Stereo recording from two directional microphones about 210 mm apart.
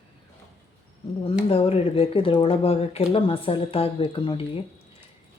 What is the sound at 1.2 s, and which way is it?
Speech, 25° left (ahead or behind).